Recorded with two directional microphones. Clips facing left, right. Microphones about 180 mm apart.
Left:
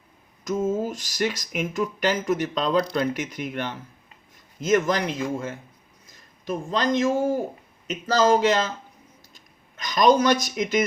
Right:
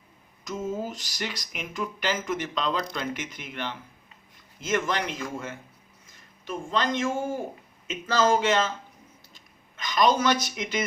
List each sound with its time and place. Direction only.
0.4 s speech: 50° left (ahead or behind)
9.7 s speech: 45° left (ahead or behind)